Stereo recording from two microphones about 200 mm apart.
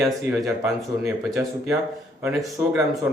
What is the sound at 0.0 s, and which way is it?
A man's voice, centre (ahead or behind).